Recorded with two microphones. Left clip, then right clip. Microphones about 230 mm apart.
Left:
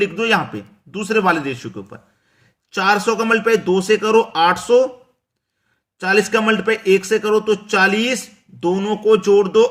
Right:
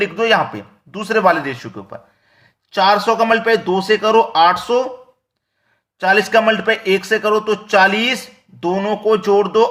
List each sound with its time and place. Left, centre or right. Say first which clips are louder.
0.0 s a man's voice: right 3 dB; centre
6.0 s a man's voice: right 3 dB; centre